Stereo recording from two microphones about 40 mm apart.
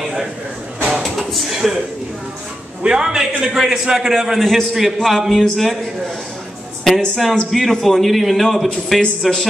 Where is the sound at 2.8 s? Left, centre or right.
Centre.